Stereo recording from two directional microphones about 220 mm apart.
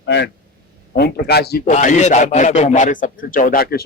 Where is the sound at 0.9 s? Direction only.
45° left (ahead or behind).